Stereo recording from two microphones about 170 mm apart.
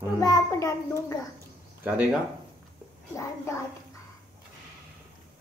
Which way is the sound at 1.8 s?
10° right (ahead or behind).